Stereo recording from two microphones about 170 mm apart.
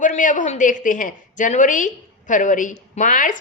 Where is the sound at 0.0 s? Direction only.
50° left (ahead or behind).